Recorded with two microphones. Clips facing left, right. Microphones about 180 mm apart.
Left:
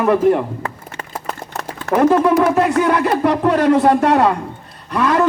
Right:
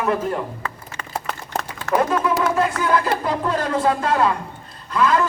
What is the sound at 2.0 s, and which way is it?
Speech, 65° left (ahead or behind).